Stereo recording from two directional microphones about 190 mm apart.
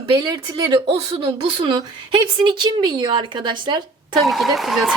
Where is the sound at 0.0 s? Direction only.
25° right (ahead or behind).